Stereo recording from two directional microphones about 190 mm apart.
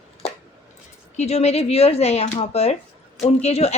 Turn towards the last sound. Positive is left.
turn(degrees=35)  # may be behind; listen again after turning